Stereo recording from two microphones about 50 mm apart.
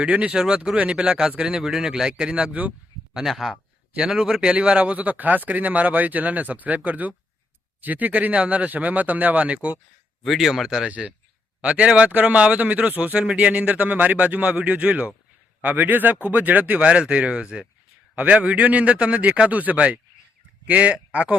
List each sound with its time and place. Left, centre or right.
0.0 s speech: right
1.6 s speech: centre; by 2.7 s right
3.2 s speech: centre
3.5 s speech: centre
10.2 s speech: centre
11.6 s speech: right
15.6 s speech: right
16.8 s speech: right